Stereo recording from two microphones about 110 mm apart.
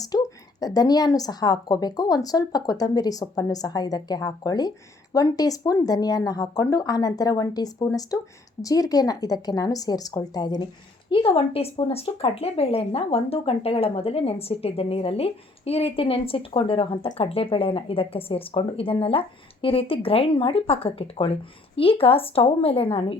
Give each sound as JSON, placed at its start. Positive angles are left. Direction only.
{"t": 0.0, "sound": "a woman's voice", "side_deg": 35}
{"t": 11.1, "sound": "speech", "side_deg": 55}